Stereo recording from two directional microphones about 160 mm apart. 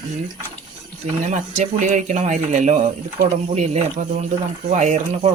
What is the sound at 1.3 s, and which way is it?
Speech, 45° right (ahead or behind).